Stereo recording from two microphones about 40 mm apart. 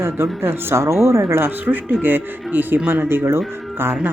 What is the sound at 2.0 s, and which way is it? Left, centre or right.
Speech, right.